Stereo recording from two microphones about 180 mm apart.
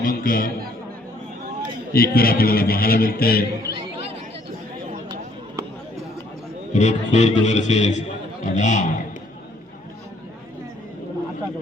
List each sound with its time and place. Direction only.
0.0 s a man's voice: 50° left (ahead or behind)
1.9 s a man's voice: 55° left (ahead or behind)
6.7 s speech: 40° left (ahead or behind)